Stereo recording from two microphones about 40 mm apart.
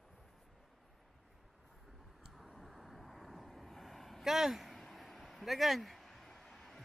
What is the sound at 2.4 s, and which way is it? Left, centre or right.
Vehicle, centre.